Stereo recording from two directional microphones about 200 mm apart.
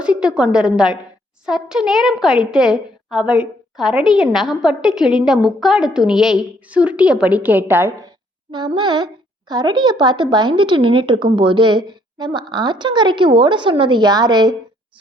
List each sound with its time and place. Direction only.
0.0 s a woman's voice: 5° right (ahead or behind)
8.5 s a woman's voice: 20° right (ahead or behind)